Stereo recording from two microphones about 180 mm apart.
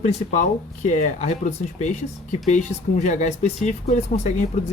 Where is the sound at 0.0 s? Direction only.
40° left (ahead or behind).